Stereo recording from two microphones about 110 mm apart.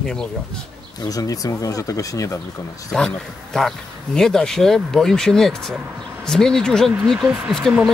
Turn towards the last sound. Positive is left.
turn(degrees=5)  # may be behind; listen again after turning